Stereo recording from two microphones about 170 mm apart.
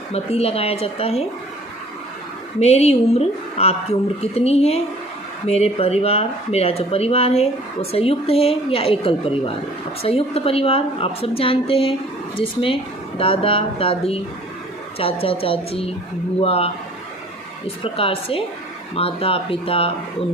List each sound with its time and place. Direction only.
0.1 s speech: 35° left (ahead or behind)
2.6 s speech: 40° left (ahead or behind)
13.1 s speech: 35° left (ahead or behind)
17.8 s speech: 35° left (ahead or behind)